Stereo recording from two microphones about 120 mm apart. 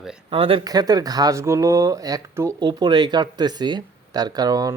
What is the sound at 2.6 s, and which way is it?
Speech, 35° right (ahead or behind).